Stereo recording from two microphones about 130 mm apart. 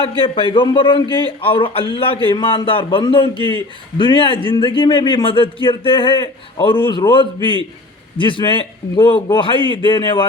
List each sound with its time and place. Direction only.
0.2 s a man's voice: 40° left (ahead or behind)